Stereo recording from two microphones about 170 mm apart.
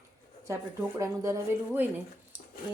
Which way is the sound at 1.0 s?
15° right (ahead or behind).